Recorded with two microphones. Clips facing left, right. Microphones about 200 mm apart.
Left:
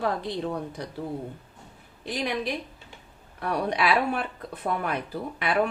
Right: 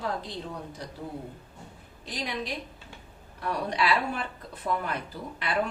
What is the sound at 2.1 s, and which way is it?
A woman's voice, 60° left (ahead or behind).